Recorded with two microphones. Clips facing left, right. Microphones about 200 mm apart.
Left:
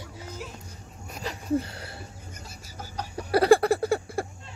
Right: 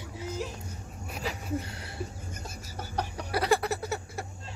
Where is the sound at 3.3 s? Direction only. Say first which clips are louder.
Left 8 dB; 55° left (ahead or behind).